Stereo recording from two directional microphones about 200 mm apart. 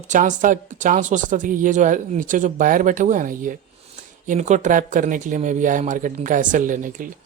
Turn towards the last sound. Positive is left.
turn(degrees=-40)  # may be behind; listen again after turning